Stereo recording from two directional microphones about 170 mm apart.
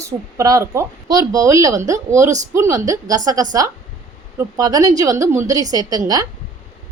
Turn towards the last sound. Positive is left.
turn(degrees=-20)  # may be behind; listen again after turning